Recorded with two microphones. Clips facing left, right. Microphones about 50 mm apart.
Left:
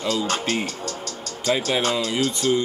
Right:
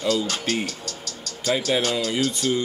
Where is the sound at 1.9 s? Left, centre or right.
Left.